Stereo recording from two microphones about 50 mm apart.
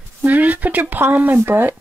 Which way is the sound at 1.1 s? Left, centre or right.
Right.